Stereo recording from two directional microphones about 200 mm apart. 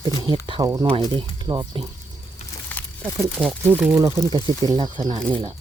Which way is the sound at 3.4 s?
5° right (ahead or behind).